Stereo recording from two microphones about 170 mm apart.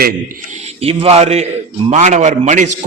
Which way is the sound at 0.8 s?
35° right (ahead or behind).